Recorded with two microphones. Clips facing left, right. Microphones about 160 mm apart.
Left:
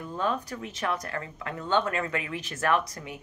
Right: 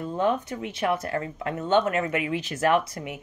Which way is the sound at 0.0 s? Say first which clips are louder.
Right 5 dB; 20° right (ahead or behind).